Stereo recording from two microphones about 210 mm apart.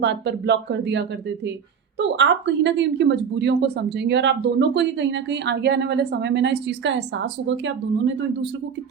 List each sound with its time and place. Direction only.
0.0 s speech: 55° right (ahead or behind)